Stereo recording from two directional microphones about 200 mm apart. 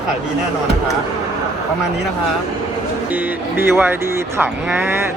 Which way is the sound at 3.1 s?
10° right (ahead or behind).